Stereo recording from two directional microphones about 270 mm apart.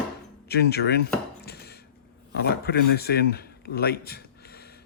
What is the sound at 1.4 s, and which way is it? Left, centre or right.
Chopping, left.